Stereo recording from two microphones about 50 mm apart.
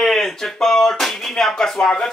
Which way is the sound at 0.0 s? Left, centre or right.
Centre.